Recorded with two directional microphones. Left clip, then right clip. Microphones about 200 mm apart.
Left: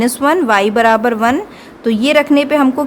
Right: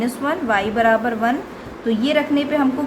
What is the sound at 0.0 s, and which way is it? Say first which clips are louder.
A woman's voice: left 9 dB; 55° left (ahead or behind).